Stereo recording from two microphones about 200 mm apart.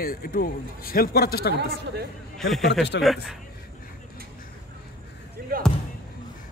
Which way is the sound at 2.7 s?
60° left (ahead or behind).